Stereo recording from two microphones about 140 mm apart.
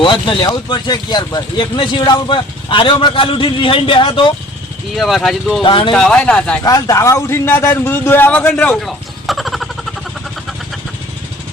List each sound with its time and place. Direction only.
0.0 s speech: 35° left (ahead or behind)
4.9 s speech: centre (ahead or behind)
5.6 s speech: 35° left (ahead or behind)
5.9 s a man's voice: 5° left (ahead or behind)
6.7 s a man's voice: 25° left (ahead or behind)
8.8 s a sound: centre (ahead or behind)